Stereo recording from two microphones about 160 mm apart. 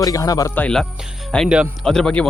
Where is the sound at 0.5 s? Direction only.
5° left (ahead or behind).